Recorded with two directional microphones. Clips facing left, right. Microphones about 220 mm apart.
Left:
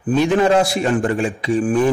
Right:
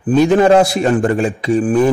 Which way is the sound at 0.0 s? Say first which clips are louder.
Right 4 dB; 40° right (ahead or behind).